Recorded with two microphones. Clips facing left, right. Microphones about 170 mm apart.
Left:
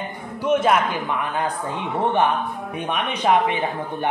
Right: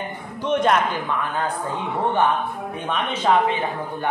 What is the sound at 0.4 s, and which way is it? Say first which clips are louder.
Speech: left 1 dB; 5° left (ahead or behind).